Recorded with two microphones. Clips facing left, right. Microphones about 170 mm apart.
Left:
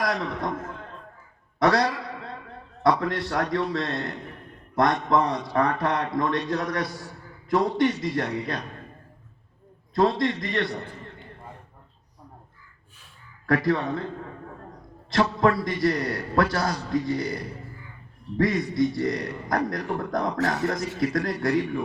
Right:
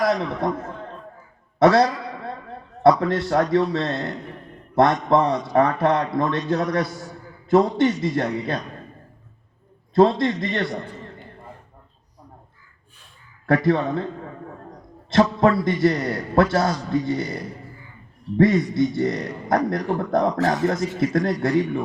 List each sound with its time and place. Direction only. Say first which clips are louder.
0.0 s a man's voice: right 6 dB; 25° right (ahead or behind)
1.5 s a man's voice: right 6 dB; 25° right (ahead or behind)
9.9 s a man's voice: right 5 dB; 25° right (ahead or behind)
13.5 s a man's voice: right 4 dB; 25° right (ahead or behind)
15.1 s a man's voice: right 4 dB; 25° right (ahead or behind)